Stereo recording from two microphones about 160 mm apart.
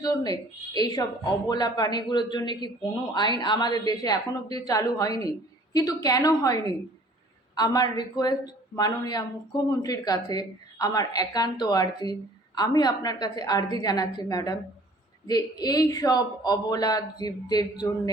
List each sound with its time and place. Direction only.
0.0 s a man's voice: 25° left (ahead or behind)